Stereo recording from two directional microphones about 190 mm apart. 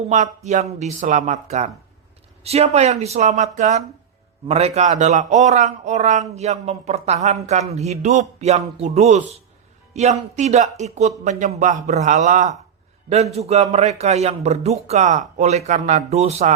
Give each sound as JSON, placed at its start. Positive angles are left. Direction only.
{"t": 0.1, "sound": "a man's voice", "side_deg": -40}